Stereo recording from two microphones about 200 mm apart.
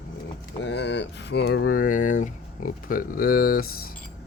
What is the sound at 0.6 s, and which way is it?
Speech, 60° left (ahead or behind).